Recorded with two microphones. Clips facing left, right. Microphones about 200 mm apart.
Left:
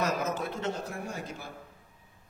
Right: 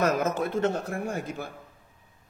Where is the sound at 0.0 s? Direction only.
50° right (ahead or behind).